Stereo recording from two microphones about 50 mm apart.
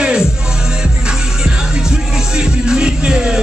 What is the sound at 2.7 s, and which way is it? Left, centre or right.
Music, centre.